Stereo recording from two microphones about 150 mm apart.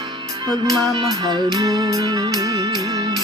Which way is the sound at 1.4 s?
25° right (ahead or behind).